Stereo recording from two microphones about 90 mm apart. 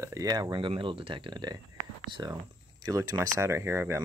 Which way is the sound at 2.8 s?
40° right (ahead or behind).